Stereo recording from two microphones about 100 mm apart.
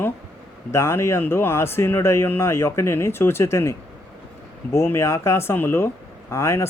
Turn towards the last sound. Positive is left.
turn(degrees=25)  # may be behind; listen again after turning